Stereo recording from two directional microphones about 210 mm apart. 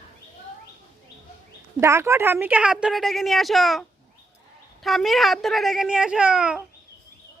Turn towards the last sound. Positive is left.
turn(degrees=-5)  # may be behind; listen again after turning